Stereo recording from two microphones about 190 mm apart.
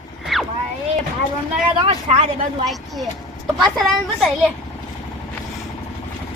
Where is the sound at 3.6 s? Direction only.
Centre (ahead or behind).